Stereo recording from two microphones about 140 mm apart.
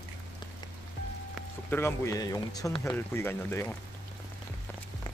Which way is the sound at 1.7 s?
15° left (ahead or behind).